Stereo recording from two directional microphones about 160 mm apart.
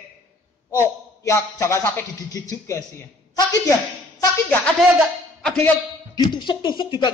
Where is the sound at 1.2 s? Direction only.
15° left (ahead or behind).